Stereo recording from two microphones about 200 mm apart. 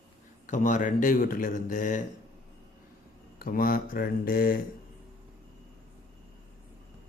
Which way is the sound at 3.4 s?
45° left (ahead or behind).